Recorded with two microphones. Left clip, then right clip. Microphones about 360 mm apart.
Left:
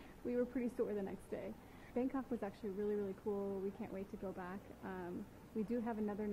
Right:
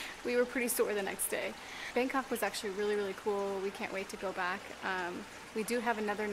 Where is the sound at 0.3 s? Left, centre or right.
Centre.